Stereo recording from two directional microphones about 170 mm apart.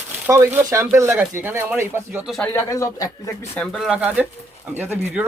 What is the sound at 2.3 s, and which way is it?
Speech, 10° left (ahead or behind).